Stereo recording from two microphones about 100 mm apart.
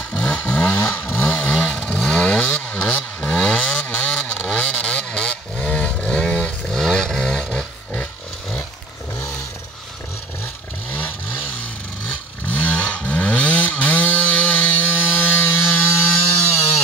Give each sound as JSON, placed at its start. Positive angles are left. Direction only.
{"t": 0.1, "sound": "vehicle", "side_deg": 15}
{"t": 10.4, "sound": "vehicle", "side_deg": 15}
{"t": 12.4, "sound": "chainsaw", "side_deg": 15}